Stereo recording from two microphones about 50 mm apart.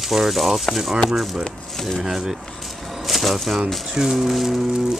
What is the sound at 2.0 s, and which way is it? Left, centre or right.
Speech, centre.